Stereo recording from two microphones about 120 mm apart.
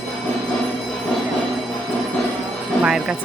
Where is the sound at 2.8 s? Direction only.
10° right (ahead or behind).